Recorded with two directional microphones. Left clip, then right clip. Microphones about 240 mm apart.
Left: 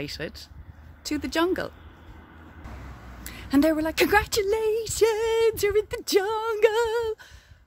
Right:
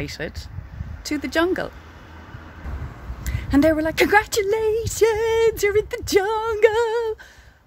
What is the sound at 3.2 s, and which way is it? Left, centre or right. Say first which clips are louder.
A woman's voice: right 4 dB; centre.